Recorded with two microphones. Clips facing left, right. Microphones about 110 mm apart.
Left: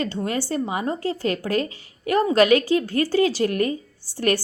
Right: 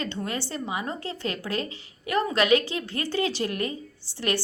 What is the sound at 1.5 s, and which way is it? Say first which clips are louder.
Speech: left 6 dB; 25° right (ahead or behind).